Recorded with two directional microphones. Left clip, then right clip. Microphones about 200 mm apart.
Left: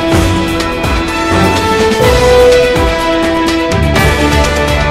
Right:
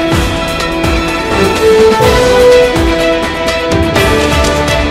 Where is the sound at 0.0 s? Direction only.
Centre (ahead or behind).